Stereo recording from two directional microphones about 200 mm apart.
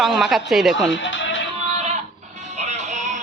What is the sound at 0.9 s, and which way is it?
Speech, 65° left (ahead or behind).